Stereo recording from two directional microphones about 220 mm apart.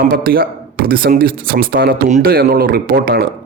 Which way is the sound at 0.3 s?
45° right (ahead or behind).